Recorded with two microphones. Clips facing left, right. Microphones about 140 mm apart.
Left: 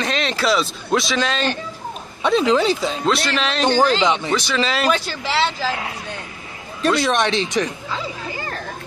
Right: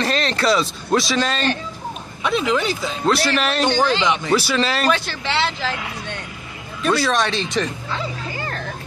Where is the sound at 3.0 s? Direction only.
Centre (ahead or behind).